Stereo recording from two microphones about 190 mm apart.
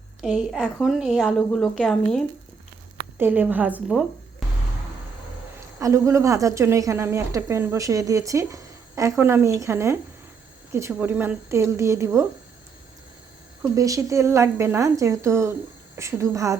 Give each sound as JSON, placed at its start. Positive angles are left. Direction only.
{"t": 0.2, "sound": "a woman's voice", "side_deg": 0}
{"t": 3.2, "sound": "a woman's voice", "side_deg": -10}
{"t": 5.8, "sound": "a woman's voice", "side_deg": -15}
{"t": 13.6, "sound": "a woman's voice", "side_deg": -15}